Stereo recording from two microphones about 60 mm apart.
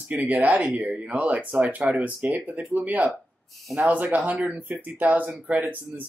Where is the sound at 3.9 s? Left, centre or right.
Right.